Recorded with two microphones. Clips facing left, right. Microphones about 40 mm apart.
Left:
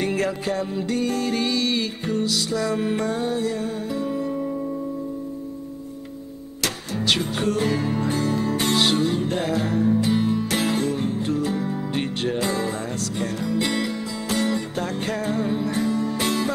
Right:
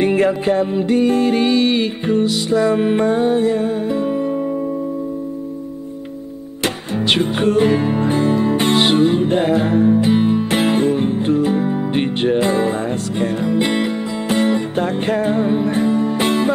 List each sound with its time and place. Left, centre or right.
0.0 s music: right
6.6 s music: right